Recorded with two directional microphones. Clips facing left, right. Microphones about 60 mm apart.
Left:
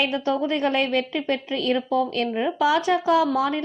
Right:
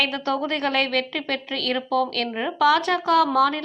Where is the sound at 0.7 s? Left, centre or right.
Right.